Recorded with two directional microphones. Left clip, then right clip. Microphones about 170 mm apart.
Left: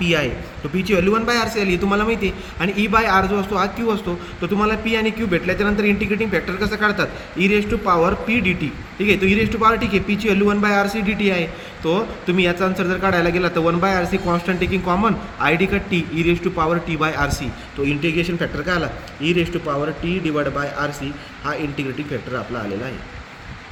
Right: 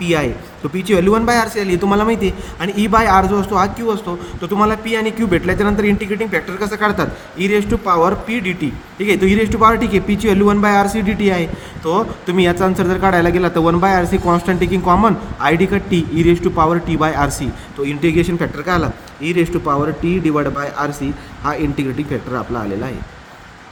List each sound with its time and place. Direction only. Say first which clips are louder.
0.0 s a man's voice: right 2 dB; 60° right (ahead or behind)
18.0 s a man's voice: right 5 dB; 65° right (ahead or behind)